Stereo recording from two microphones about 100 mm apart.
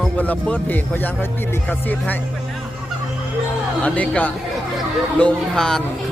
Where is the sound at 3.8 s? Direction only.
15° left (ahead or behind).